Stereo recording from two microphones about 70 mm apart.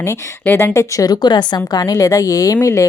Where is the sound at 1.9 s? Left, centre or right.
Left.